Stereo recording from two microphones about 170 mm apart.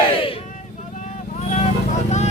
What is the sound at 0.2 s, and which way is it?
Vehicle, 30° left (ahead or behind).